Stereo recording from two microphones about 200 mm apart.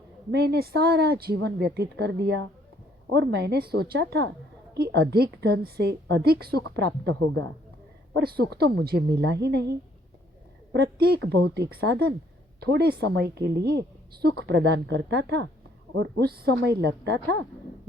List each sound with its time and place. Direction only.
0.3 s a woman's voice: 55° right (ahead or behind)